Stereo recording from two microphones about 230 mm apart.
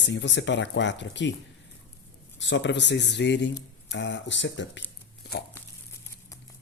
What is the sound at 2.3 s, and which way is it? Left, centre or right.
A man's voice, left.